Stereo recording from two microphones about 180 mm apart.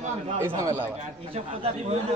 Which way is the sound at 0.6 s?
15° right (ahead or behind).